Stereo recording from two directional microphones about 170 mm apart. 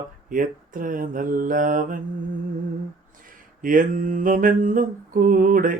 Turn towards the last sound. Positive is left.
turn(degrees=-55)  # may be behind; listen again after turning